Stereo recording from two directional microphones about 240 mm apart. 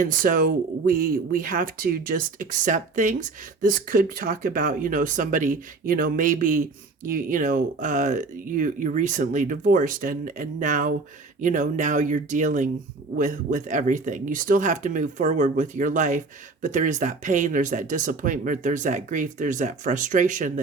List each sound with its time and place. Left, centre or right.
0.0 s speech: right